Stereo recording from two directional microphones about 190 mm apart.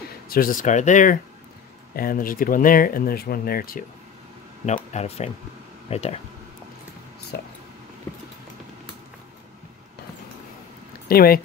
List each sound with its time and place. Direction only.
0.3 s speech: 50° left (ahead or behind)
4.9 s speech: 35° left (ahead or behind)
7.3 s speech: 55° left (ahead or behind)
11.1 s speech: 50° left (ahead or behind)